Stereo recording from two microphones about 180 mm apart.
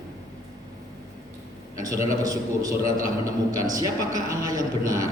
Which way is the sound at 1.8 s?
20° right (ahead or behind).